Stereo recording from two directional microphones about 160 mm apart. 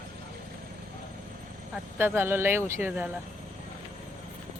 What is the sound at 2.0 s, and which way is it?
Speech, 15° right (ahead or behind).